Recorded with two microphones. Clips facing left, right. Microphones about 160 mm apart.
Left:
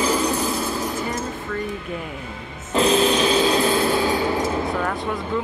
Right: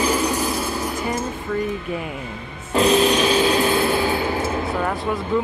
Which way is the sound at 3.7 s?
10° right (ahead or behind).